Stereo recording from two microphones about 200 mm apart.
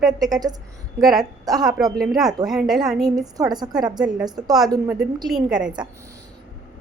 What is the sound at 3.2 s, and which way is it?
A woman's voice, 20° right (ahead or behind).